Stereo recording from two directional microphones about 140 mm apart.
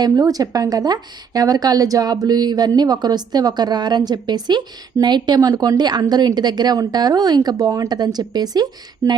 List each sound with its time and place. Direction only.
0.0 s a woman's voice: 25° right (ahead or behind)